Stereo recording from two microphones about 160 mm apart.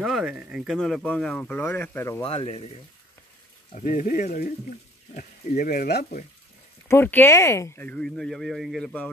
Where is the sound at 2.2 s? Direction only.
35° left (ahead or behind).